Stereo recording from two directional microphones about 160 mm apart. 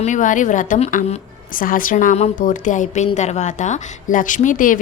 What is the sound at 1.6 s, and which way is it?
A woman's voice, 60° left (ahead or behind).